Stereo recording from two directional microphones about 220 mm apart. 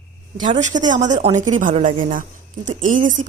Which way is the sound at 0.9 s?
35° right (ahead or behind).